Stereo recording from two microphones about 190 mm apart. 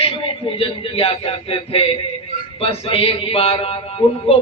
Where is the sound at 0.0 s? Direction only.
30° left (ahead or behind).